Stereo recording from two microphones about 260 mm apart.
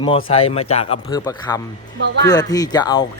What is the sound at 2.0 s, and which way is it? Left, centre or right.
Speech, right.